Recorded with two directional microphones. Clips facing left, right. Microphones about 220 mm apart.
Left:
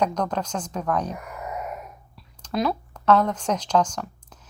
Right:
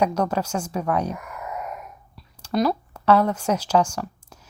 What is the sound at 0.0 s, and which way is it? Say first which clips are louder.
Speech: right 3 dB; 10° right (ahead or behind).